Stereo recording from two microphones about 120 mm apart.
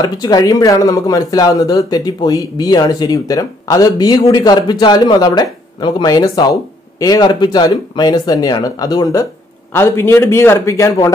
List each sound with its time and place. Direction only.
0.0 s a man's voice: 35° left (ahead or behind)